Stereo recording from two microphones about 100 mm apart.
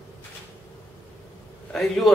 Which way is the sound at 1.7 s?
5° left (ahead or behind).